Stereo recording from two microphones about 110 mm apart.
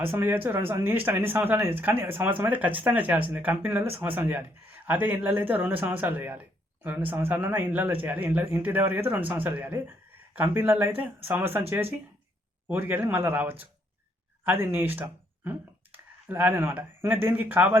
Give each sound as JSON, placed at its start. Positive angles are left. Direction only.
{"t": 0.0, "sound": "speech", "side_deg": -20}